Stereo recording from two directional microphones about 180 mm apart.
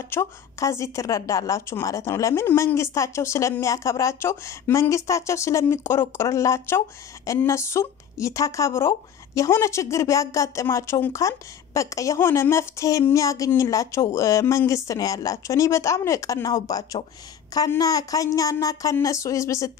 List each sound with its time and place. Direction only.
0.1 s speech: 15° left (ahead or behind)